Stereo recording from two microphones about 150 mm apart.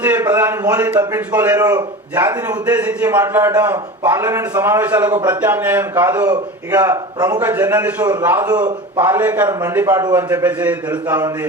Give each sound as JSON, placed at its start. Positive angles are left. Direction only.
{"t": 0.0, "sound": "a man's voice", "side_deg": -15}
{"t": 1.5, "sound": "a man's voice", "side_deg": -25}
{"t": 2.1, "sound": "a man's voice", "side_deg": -10}
{"t": 6.7, "sound": "a man's voice", "side_deg": -25}
{"t": 7.3, "sound": "a man's voice", "side_deg": -10}